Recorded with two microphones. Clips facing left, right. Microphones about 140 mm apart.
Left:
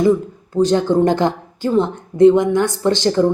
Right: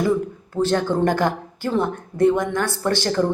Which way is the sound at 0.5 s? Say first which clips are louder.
Left 6 dB; 15° left (ahead or behind).